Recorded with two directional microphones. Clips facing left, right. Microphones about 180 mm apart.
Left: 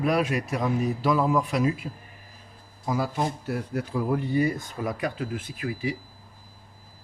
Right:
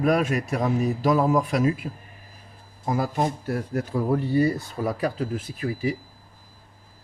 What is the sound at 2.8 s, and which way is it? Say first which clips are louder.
Speech: right 2 dB; 50° right (ahead or behind).